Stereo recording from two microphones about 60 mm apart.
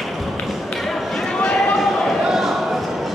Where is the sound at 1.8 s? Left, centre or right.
Centre.